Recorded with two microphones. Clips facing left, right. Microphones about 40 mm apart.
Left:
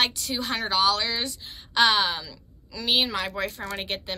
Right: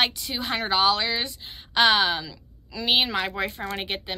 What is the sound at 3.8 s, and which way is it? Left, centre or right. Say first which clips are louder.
Speech: right 1 dB; centre.